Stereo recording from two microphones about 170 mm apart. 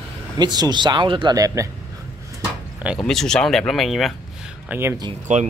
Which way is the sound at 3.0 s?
5° left (ahead or behind).